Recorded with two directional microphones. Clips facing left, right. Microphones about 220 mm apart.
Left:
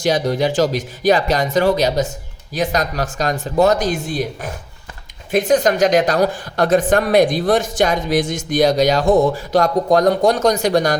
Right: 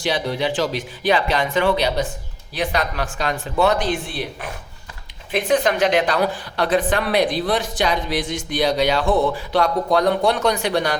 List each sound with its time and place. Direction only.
0.0 s speech: 45° left (ahead or behind)